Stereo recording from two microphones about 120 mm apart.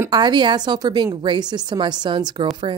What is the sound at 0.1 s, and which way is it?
A woman's voice, 40° right (ahead or behind).